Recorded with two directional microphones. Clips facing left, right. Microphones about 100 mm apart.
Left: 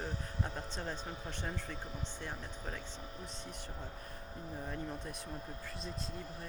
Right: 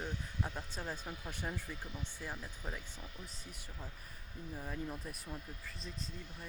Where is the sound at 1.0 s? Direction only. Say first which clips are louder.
Left 2 dB; 35° left (ahead or behind).